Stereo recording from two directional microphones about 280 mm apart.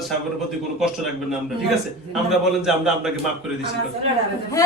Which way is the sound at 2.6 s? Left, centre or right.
Centre.